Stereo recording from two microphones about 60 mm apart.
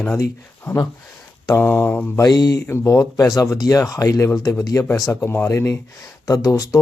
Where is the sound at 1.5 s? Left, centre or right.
Left.